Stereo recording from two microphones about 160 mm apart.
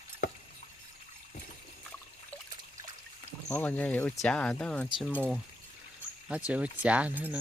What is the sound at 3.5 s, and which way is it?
Speech, 10° left (ahead or behind).